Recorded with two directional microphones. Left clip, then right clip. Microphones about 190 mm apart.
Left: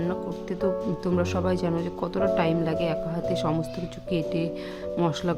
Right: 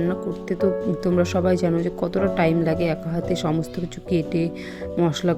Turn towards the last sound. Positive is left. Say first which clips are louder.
# right 4 dB
turn(degrees=-10)  # may be behind; listen again after turning